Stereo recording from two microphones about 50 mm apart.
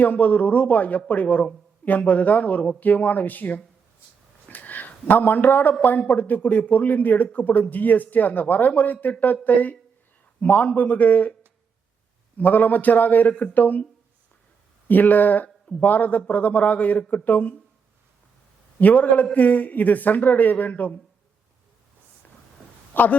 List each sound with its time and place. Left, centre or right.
0.0 s a man's voice: left
4.4 s a sound: left
6.1 s a man's voice: left
12.4 s a man's voice: left
14.8 s a man's voice: left
18.8 s a man's voice: left
22.9 s speech: left